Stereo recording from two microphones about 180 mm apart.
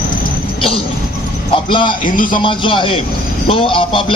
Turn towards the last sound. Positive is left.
turn(degrees=30)  # may be behind; listen again after turning